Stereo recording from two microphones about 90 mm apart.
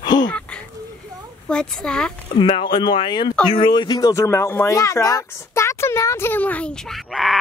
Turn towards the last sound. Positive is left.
turn(degrees=0)  # may be behind; listen again after turning